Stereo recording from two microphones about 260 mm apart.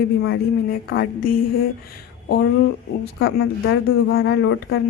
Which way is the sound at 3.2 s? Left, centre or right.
Left.